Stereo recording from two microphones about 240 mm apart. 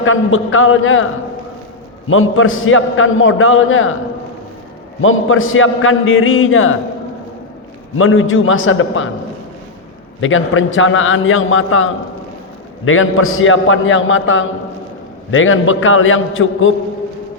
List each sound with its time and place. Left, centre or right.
0.0 s a man's voice: left
2.0 s a man's voice: left
4.9 s a man's voice: left
7.9 s a man's voice: left
10.2 s a man's voice: left